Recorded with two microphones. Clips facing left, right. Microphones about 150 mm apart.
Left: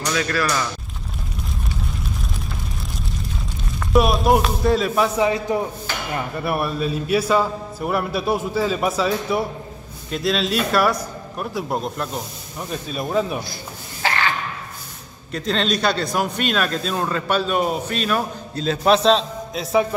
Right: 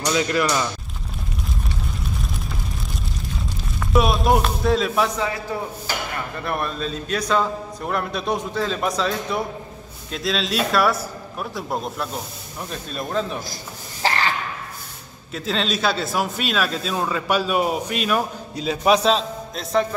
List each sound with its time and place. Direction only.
0.0 s speech: 20° right (ahead or behind)
3.9 s a man's voice: centre (ahead or behind)
5.2 s a man's voice: 20° left (ahead or behind)
6.4 s a man's voice: 10° left (ahead or behind)
14.0 s a sound: 35° right (ahead or behind)
15.3 s a man's voice: centre (ahead or behind)